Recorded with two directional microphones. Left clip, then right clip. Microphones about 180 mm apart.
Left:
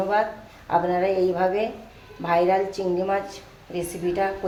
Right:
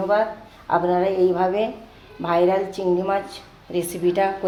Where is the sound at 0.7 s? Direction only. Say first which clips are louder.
Right 2 dB; 35° right (ahead or behind).